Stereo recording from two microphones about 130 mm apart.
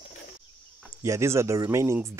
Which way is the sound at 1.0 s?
20° right (ahead or behind).